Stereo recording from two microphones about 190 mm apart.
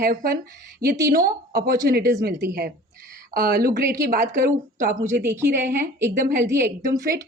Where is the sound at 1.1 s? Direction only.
50° right (ahead or behind).